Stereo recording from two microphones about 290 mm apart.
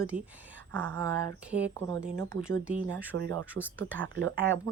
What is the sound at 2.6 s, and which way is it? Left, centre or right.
Speech, centre.